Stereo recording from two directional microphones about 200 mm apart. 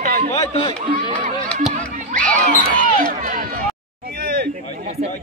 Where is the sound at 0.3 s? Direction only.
25° left (ahead or behind).